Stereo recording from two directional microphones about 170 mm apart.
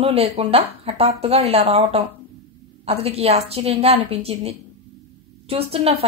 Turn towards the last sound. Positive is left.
turn(degrees=-35)  # may be behind; listen again after turning